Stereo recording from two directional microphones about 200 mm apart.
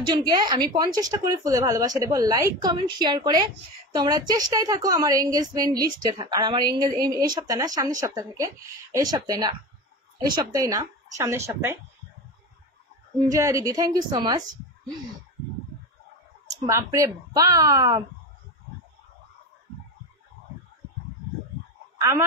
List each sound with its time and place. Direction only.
0.0 s speech: 20° right (ahead or behind)
13.3 s speech: 15° right (ahead or behind)
16.5 s speech: 15° right (ahead or behind)